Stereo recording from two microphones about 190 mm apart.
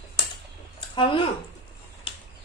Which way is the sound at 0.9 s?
25° left (ahead or behind).